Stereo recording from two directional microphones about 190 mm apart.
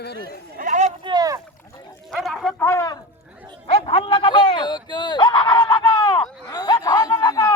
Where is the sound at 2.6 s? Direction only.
15° left (ahead or behind).